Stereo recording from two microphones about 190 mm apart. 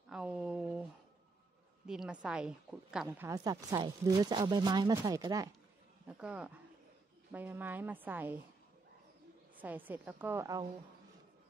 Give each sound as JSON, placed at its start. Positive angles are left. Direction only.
{"t": 0.1, "sound": "a sound", "side_deg": -5}
{"t": 1.9, "sound": "a woman's voice", "side_deg": -5}
{"t": 3.1, "sound": "speech", "side_deg": -15}
{"t": 6.1, "sound": "a woman's voice", "side_deg": -5}
{"t": 9.6, "sound": "a woman's voice", "side_deg": -10}